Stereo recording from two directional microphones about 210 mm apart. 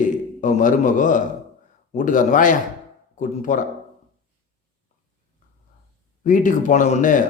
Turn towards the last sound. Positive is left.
turn(degrees=40)  # may be behind; listen again after turning